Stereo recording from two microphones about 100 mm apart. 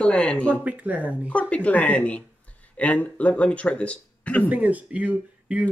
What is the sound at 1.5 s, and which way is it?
Speech, 15° left (ahead or behind).